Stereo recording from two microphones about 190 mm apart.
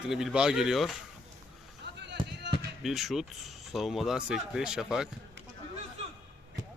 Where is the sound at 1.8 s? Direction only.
65° right (ahead or behind).